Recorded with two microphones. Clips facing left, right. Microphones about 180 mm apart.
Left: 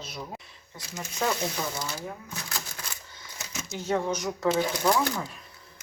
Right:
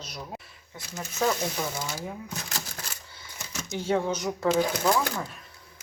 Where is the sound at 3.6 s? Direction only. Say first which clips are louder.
Right 5 dB; 20° right (ahead or behind).